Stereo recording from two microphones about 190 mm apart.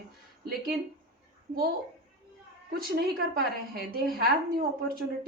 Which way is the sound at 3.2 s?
55° right (ahead or behind).